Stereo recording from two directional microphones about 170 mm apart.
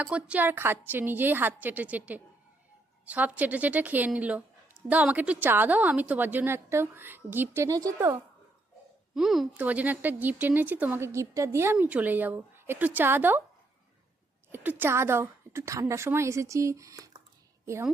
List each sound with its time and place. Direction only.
0.0 s speech: 10° right (ahead or behind)
9.1 s speech: centre (ahead or behind)
14.5 s speech: 10° right (ahead or behind)